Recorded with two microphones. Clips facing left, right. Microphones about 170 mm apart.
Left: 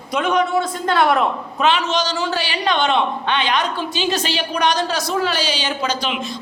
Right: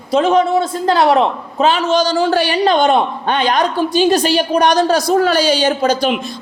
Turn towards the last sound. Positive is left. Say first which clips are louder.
# right 9 dB
turn(degrees=-50)  # may be behind; listen again after turning